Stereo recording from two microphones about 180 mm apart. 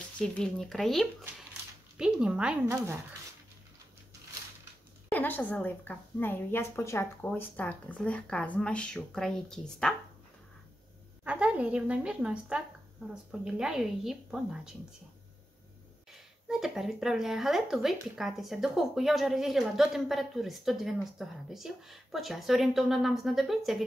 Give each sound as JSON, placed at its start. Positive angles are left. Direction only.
{"t": 0.2, "sound": "speech", "side_deg": 5}
{"t": 5.1, "sound": "speech", "side_deg": 10}
{"t": 11.2, "sound": "a woman's voice", "side_deg": -5}
{"t": 16.4, "sound": "speech", "side_deg": 0}